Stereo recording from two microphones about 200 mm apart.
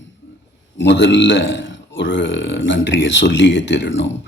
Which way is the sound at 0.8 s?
60° left (ahead or behind).